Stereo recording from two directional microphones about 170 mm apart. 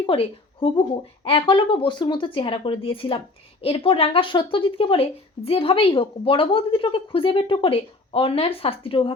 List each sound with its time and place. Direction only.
0.0 s a woman's voice: 30° left (ahead or behind)